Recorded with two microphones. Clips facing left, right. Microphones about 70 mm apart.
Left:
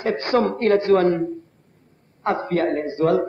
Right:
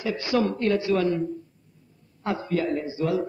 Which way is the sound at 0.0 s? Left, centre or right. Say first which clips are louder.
Left 5 dB; left.